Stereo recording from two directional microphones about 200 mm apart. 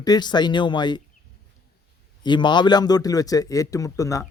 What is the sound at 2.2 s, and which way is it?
A man's voice, 25° left (ahead or behind).